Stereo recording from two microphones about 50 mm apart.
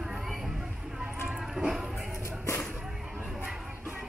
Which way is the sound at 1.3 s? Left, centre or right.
Centre.